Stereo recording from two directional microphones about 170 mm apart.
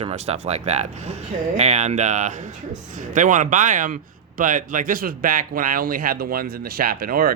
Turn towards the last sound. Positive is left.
turn(degrees=-60)  # may be behind; listen again after turning